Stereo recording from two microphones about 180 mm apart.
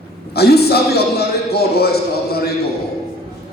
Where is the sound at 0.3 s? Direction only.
60° left (ahead or behind).